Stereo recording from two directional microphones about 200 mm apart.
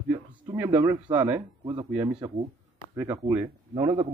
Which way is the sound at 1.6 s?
20° right (ahead or behind).